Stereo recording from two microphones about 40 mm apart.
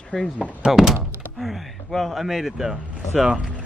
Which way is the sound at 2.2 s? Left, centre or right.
Centre.